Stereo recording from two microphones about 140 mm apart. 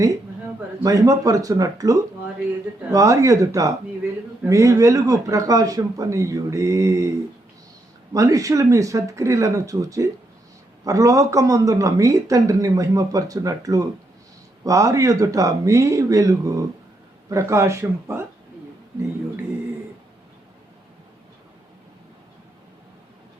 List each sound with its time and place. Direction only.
0.8 s speech: 25° right (ahead or behind)
8.1 s speech: 25° right (ahead or behind)